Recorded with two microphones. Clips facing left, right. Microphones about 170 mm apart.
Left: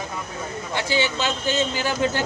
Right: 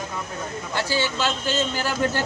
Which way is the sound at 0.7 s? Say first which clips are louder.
Left 1 dB; 20° left (ahead or behind).